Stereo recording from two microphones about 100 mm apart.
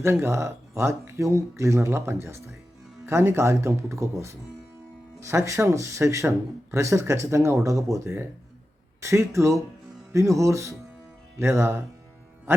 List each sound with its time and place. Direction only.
0.0 s speech: 25° right (ahead or behind)